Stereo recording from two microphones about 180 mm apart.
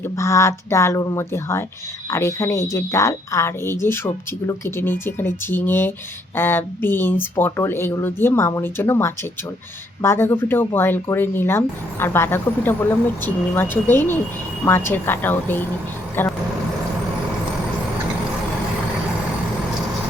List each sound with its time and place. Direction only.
0.2 s speech: 15° left (ahead or behind)